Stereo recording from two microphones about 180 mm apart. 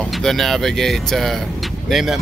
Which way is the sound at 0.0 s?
Centre (ahead or behind).